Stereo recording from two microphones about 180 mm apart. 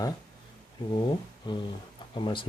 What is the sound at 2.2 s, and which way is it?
Speech, 25° left (ahead or behind).